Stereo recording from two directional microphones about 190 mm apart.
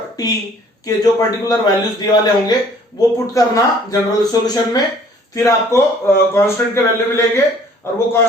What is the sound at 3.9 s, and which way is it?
A man's voice, 20° left (ahead or behind).